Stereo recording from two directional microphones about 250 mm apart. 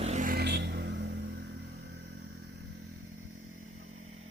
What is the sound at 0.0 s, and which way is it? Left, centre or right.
Vehicle, right.